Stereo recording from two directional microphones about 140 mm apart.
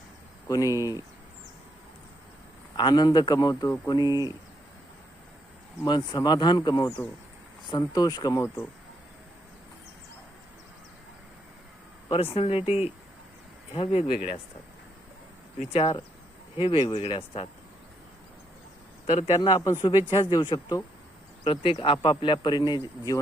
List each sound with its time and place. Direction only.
0.4 s speech: 25° left (ahead or behind)
2.7 s speech: 30° left (ahead or behind)
5.8 s speech: 30° left (ahead or behind)
12.1 s speech: 45° left (ahead or behind)
15.7 s speech: 45° left (ahead or behind)
19.0 s speech: 50° left (ahead or behind)
20.1 s speech: 35° left (ahead or behind)
21.4 s speech: 40° left (ahead or behind)